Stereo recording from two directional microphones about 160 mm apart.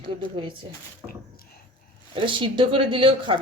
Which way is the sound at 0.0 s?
30° right (ahead or behind).